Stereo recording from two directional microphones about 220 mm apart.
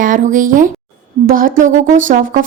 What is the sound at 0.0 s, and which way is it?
A woman's voice, 35° right (ahead or behind).